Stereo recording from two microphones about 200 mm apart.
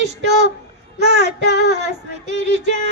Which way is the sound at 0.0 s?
60° right (ahead or behind).